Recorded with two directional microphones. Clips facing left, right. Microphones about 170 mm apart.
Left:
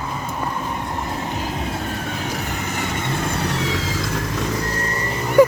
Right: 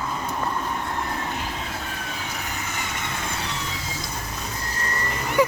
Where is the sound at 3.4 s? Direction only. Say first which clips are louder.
Left 9 dB; 70° left (ahead or behind); by 4.2 s 90° left.